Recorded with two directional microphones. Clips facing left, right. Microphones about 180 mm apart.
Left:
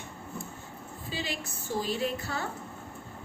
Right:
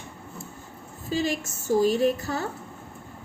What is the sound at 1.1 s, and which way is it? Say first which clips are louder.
A woman's voice: right 10 dB; 45° right (ahead or behind).